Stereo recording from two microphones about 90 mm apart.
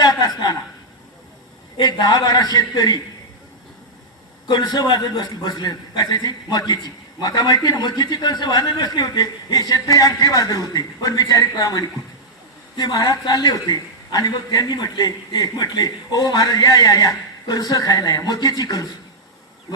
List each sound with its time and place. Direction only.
0.0 s chuckle: 45° left (ahead or behind)
1.8 s a man's voice: 50° left (ahead or behind)
4.4 s a man's voice: 50° left (ahead or behind)